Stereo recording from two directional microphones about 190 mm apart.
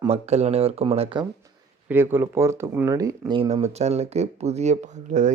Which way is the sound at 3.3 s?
25° right (ahead or behind).